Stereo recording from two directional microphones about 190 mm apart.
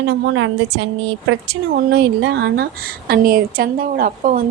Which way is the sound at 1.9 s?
60° right (ahead or behind).